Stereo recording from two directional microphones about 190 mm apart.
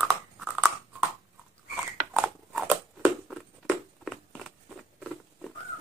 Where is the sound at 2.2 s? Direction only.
Centre (ahead or behind).